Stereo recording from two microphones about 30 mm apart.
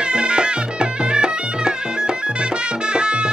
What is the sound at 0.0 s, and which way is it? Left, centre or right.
Music, right.